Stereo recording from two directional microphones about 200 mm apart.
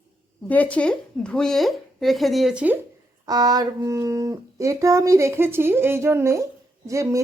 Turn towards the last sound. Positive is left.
turn(degrees=-15)  # may be behind; listen again after turning